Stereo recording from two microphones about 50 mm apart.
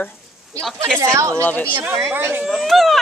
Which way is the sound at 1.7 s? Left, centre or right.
Right.